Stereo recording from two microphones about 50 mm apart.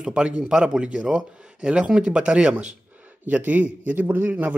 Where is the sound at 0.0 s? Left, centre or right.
Centre.